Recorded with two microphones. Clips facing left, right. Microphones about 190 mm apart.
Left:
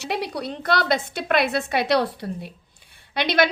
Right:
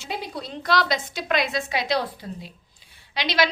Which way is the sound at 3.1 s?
55° left (ahead or behind).